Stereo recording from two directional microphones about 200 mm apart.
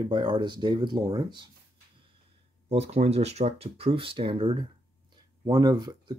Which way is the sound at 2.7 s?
35° right (ahead or behind).